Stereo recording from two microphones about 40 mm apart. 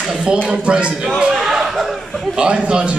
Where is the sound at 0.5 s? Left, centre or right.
Right.